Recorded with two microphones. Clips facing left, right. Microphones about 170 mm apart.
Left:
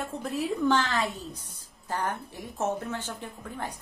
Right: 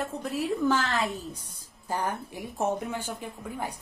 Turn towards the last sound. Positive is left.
turn(degrees=-10)  # may be behind; listen again after turning